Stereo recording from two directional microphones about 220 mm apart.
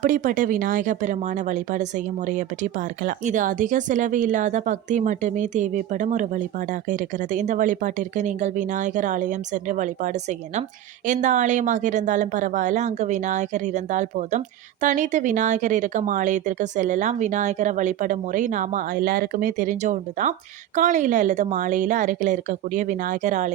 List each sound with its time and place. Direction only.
0.0 s speech: 35° right (ahead or behind)